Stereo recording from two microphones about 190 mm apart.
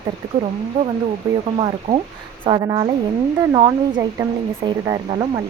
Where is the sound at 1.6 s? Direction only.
30° right (ahead or behind).